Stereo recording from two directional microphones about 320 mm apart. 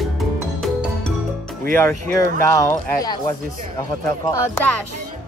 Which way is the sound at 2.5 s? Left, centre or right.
Centre.